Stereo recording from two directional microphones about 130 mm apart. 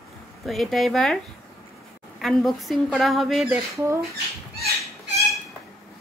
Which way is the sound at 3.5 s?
20° right (ahead or behind).